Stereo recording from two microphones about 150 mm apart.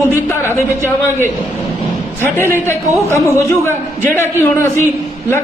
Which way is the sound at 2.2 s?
15° left (ahead or behind).